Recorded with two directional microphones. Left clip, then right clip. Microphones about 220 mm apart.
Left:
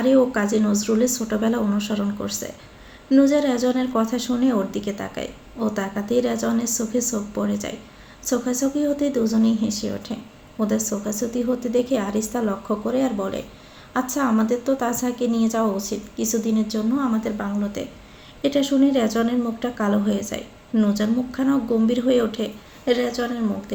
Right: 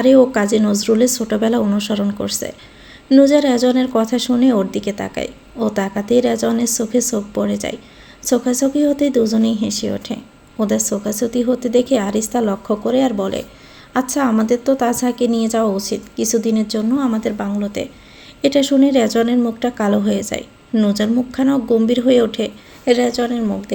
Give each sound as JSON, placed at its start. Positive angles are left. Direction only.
{"t": 0.0, "sound": "a woman's voice", "side_deg": -40}